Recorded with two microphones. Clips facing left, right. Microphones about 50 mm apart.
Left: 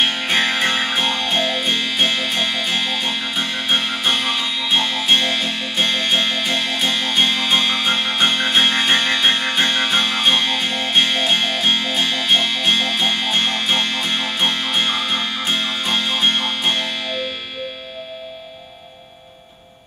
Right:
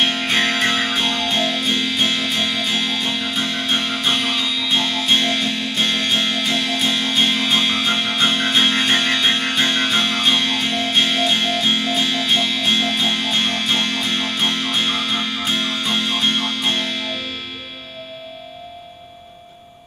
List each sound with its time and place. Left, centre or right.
0.2 s music: centre
12.0 s music: left
12.3 s music: centre